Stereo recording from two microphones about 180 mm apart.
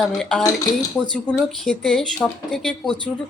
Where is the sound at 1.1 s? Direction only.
5° left (ahead or behind).